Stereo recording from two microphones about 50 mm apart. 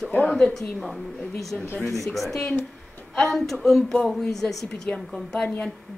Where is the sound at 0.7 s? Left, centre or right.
Centre.